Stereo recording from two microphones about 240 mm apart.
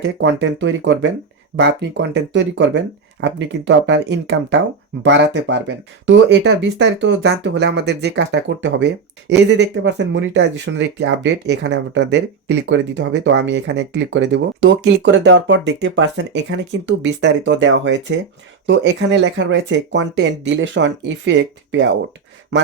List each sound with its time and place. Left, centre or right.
0.0 s speech: right